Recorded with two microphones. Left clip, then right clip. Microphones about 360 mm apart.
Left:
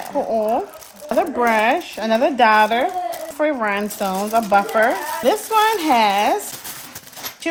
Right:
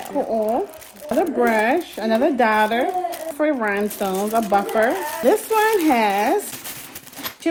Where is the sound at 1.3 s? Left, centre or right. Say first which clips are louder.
Left 2 dB; left.